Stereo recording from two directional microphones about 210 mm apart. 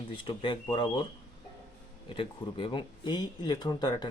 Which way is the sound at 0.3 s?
25° left (ahead or behind).